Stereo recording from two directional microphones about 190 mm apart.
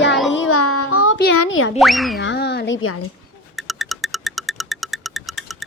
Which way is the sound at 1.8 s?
Centre (ahead or behind).